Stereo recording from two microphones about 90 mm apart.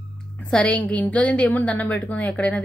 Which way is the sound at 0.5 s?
10° left (ahead or behind).